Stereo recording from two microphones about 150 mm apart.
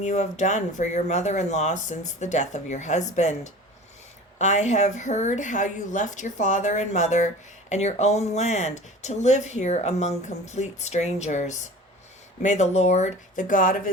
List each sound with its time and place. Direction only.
0.0 s speech: 55° left (ahead or behind)